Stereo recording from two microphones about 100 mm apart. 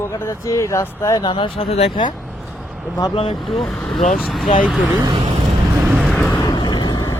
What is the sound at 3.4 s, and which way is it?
Speech, centre (ahead or behind).